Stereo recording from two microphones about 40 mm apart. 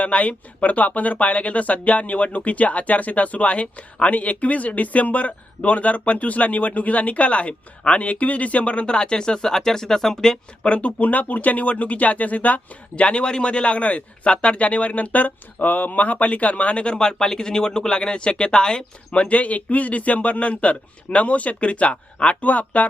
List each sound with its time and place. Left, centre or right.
0.0 s speech: left; by 10.7 s centre
10.7 s speech: left
13.1 s speech: left
19.1 s speech: left